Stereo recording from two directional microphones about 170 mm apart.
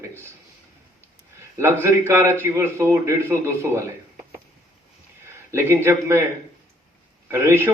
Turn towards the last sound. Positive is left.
turn(degrees=-15)  # may be behind; listen again after turning